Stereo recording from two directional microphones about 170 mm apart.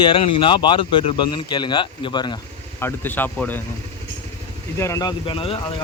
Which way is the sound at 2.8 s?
10° left (ahead or behind).